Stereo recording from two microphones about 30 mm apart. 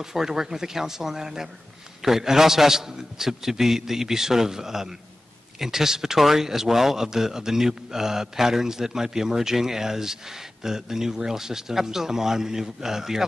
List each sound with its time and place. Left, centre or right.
0.0 s speech: centre